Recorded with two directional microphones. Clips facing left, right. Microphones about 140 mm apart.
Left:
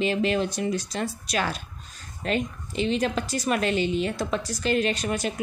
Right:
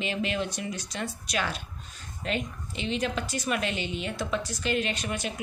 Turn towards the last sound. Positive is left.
turn(degrees=40)  # may be behind; listen again after turning